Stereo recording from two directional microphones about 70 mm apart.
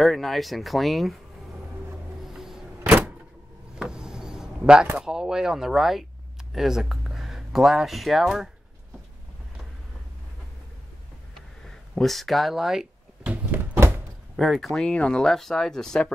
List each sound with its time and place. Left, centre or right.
0.0 s speech: centre
2.3 s vehicle: centre
3.7 s vehicle: centre
5.0 s speech: centre
11.3 s a sound: centre
13.2 s a sound: right
13.7 s door: right
14.3 s speech: centre
14.8 s speech: centre